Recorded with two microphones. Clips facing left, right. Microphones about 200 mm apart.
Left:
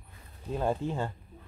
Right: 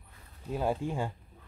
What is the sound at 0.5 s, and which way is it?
Speech, 10° right (ahead or behind).